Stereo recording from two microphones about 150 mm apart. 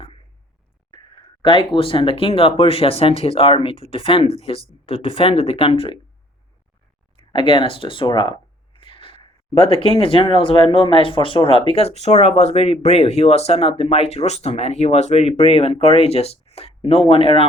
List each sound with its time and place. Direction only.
1.4 s speech: 35° left (ahead or behind)
7.3 s speech: 35° left (ahead or behind)